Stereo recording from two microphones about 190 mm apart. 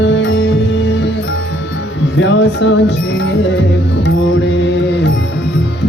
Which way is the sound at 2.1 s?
70° left (ahead or behind).